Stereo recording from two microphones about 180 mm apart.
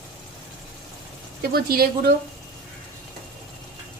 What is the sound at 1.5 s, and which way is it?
Speech, 60° right (ahead or behind).